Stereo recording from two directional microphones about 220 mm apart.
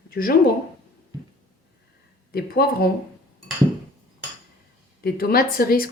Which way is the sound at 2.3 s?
45° left (ahead or behind).